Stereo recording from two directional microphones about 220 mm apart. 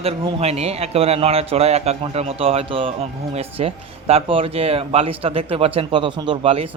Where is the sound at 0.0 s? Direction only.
30° right (ahead or behind).